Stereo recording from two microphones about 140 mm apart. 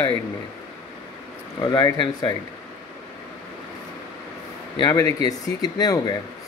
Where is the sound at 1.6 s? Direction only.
30° left (ahead or behind).